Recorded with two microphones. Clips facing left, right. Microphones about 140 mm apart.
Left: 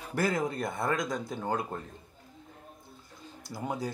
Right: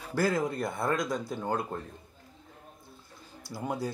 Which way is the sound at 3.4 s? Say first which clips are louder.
Right 1 dB; 20° left (ahead or behind).